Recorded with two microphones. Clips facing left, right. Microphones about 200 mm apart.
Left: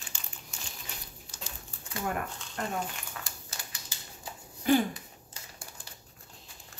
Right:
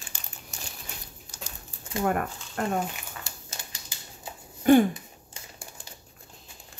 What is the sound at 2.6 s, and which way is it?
Speech, 60° right (ahead or behind).